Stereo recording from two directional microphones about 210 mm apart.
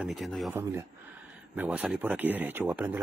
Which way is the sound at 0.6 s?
15° right (ahead or behind).